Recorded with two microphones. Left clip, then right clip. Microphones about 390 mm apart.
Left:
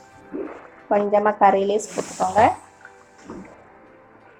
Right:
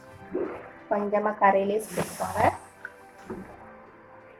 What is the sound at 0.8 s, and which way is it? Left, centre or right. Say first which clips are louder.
Speech: left 8 dB; centre.